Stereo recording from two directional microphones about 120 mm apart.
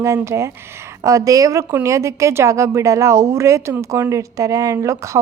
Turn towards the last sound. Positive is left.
turn(degrees=-25)  # may be behind; listen again after turning